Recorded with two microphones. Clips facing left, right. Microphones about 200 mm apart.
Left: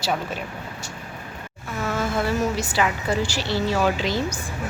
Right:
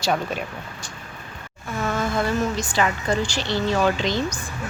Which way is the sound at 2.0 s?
5° left (ahead or behind).